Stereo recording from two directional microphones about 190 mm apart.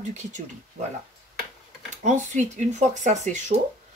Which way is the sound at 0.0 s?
40° right (ahead or behind).